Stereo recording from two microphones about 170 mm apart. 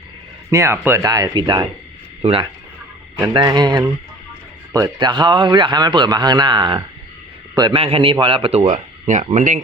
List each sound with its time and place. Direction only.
0.5 s a man's voice: 15° right (ahead or behind); by 8.7 s 35° right (ahead or behind)
8.7 s speech: 45° right (ahead or behind)